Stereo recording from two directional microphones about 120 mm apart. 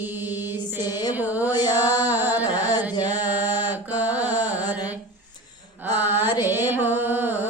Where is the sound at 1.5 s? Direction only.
35° left (ahead or behind).